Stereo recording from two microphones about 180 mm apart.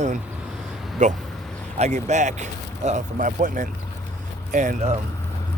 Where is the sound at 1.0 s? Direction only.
40° right (ahead or behind).